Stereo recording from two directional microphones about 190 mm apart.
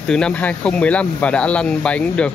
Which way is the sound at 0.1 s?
5° left (ahead or behind).